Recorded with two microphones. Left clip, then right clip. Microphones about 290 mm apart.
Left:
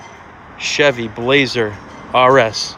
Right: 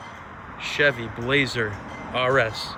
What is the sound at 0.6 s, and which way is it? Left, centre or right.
Speech, centre.